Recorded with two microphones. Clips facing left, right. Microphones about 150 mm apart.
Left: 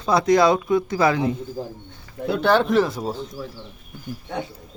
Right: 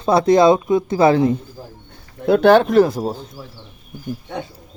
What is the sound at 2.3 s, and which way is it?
Speech, 75° right (ahead or behind).